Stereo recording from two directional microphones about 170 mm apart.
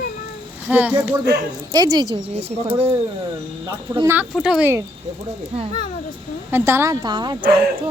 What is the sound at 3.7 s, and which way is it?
Speech, 20° right (ahead or behind).